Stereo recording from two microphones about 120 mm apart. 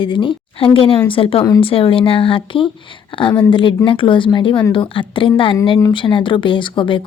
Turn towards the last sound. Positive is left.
turn(degrees=45)  # may be behind; listen again after turning